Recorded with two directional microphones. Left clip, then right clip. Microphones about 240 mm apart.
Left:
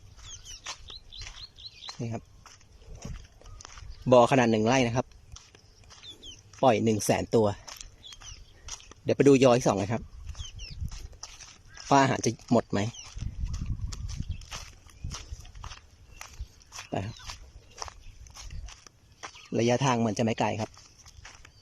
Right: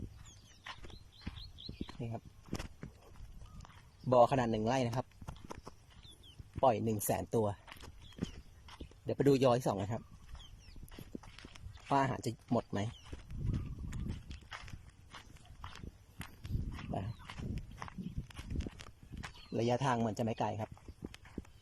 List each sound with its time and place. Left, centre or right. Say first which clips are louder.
2.0 s speech: left 8 dB; centre
4.1 s speech: left 8 dB; centre
6.6 s speech: left 8 dB; centre
7.6 s a sound: left 9 dB; centre
8.6 s speech: left 12 dB; centre
11.7 s speech: left 10 dB; centre
15.1 s walk: left 9 dB; centre
19.5 s speech: left 8 dB; centre